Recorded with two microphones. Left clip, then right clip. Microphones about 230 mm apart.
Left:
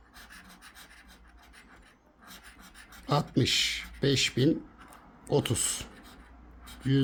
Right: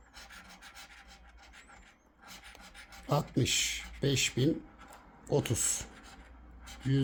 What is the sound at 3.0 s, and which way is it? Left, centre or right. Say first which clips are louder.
Speech: left 4 dB; centre.